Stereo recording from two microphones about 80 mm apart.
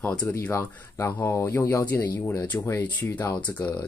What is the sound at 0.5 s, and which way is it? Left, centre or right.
Speech, left.